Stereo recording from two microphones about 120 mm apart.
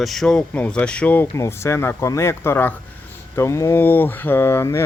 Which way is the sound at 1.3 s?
25° left (ahead or behind).